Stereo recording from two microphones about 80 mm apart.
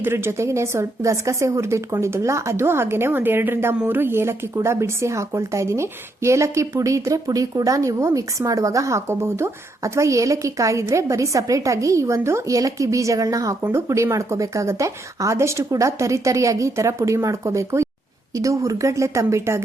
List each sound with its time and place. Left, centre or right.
0.0 s speech: right